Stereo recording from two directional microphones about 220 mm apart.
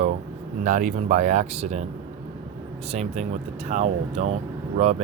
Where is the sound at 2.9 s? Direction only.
30° right (ahead or behind).